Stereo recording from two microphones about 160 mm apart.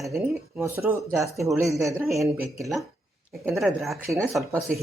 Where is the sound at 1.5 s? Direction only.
Centre (ahead or behind).